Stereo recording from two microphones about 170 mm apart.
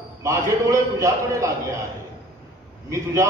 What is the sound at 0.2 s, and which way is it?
A man's voice, 20° right (ahead or behind).